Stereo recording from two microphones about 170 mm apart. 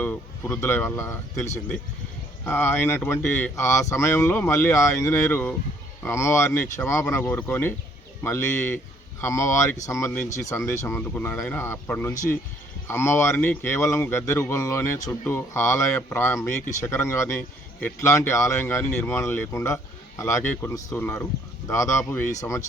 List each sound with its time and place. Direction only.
0.0 s speech: 10° left (ahead or behind)